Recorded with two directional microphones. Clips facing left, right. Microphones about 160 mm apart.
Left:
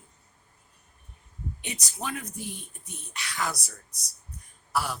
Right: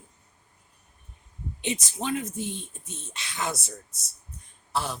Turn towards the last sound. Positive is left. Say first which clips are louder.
# even
turn(degrees=-25)  # may be behind; listen again after turning